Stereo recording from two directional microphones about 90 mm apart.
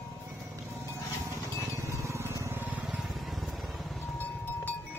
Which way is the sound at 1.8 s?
35° right (ahead or behind).